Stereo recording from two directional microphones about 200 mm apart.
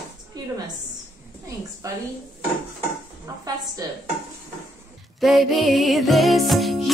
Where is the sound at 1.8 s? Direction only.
15° right (ahead or behind).